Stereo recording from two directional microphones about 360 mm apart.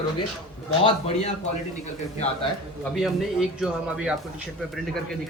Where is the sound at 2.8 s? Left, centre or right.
Centre.